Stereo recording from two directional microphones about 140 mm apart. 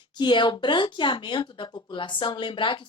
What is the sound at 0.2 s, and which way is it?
Speech, 35° left (ahead or behind).